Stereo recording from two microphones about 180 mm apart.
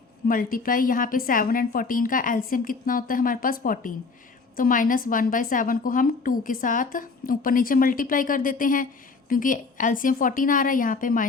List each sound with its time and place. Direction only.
0.3 s a woman's voice: 50° left (ahead or behind)